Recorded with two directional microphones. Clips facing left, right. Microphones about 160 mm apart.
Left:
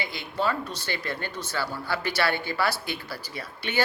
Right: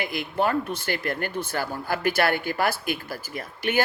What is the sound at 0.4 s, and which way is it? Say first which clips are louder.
A woman's voice: right 3 dB; 55° right (ahead or behind).